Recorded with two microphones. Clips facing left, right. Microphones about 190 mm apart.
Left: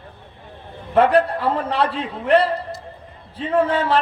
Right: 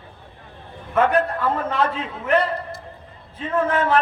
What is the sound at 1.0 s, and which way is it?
A man's voice, 35° left (ahead or behind).